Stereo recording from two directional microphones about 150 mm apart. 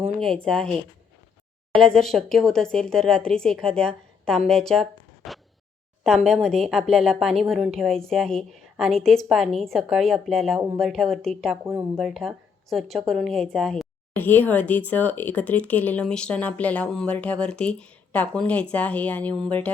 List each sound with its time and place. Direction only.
0.2 s a woman's voice: 5° left (ahead or behind)
1.8 s a woman's voice: 5° left (ahead or behind)
11.6 s speech: 20° right (ahead or behind)
11.9 s a woman's voice: centre (ahead or behind)